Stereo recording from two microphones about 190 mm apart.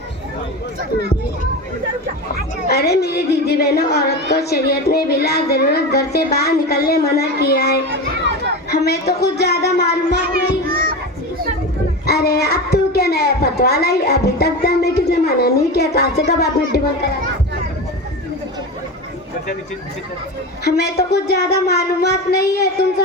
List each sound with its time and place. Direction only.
2.6 s a woman's voice: 55° left (ahead or behind)
10.3 s children playing: 50° right (ahead or behind)
12.0 s a woman's voice: 55° left (ahead or behind)
20.7 s a woman's voice: 55° left (ahead or behind)